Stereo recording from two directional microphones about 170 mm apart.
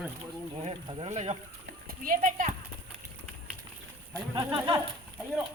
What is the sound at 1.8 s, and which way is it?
Horse, 55° right (ahead or behind).